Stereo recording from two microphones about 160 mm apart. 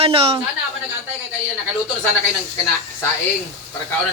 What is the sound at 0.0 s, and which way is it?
Speech, 35° right (ahead or behind).